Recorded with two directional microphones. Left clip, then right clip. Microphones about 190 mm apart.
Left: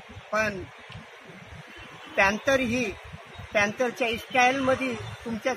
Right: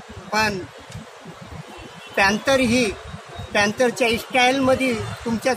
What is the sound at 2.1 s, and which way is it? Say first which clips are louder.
Speech: right 5 dB; 10° right (ahead or behind).